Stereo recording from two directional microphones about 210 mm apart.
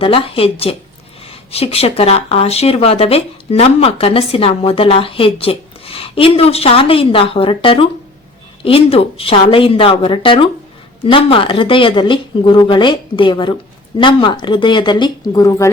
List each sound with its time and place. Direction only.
0.0 s speech: 25° left (ahead or behind)